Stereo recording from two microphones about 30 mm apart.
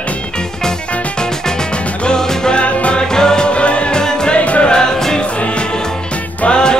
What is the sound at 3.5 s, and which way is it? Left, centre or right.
Music, left.